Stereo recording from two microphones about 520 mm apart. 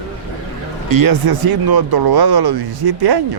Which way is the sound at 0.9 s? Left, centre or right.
Right.